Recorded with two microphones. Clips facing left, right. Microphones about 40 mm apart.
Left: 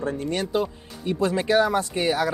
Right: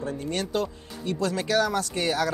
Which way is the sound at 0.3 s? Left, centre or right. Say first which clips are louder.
Left 2 dB; centre.